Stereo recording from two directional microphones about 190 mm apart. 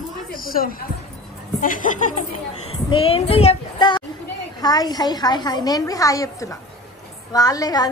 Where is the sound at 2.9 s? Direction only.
30° left (ahead or behind).